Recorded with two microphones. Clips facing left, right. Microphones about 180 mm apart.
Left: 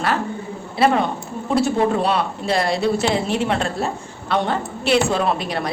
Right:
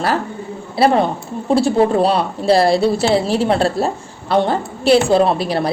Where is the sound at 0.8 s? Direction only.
35° right (ahead or behind).